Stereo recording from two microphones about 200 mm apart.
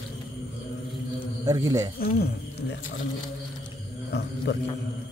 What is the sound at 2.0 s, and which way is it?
Speech, 55° left (ahead or behind).